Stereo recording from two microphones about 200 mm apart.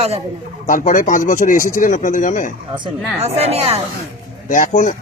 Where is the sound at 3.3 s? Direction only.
30° right (ahead or behind).